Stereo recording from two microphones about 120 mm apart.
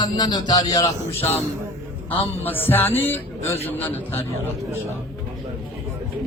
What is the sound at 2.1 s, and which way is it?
A man's voice, 15° left (ahead or behind).